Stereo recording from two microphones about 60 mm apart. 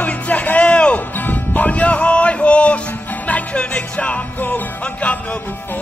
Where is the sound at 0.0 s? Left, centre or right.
Left.